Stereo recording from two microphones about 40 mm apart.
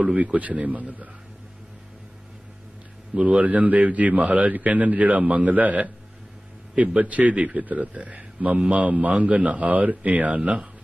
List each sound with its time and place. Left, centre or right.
0.0 s a man's voice: right
3.2 s a man's voice: right